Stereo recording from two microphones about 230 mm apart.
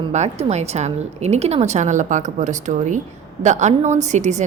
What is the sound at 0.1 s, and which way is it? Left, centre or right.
A woman's voice, right.